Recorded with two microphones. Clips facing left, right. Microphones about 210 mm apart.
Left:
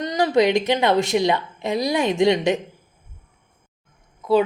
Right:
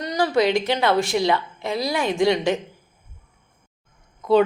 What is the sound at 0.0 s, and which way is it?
A woman's voice, 20° left (ahead or behind).